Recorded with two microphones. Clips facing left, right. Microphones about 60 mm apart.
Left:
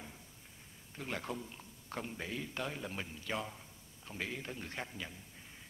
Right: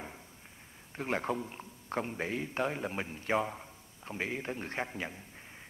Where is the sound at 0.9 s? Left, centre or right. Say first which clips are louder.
Right 8 dB; right.